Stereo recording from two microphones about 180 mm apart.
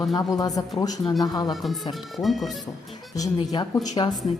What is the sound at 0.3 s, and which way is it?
Speech, 20° left (ahead or behind).